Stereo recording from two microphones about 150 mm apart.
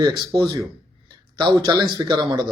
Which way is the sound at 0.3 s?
25° right (ahead or behind).